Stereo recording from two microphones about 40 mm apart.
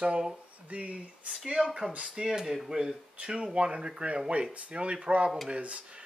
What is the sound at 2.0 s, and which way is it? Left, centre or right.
Speech, centre.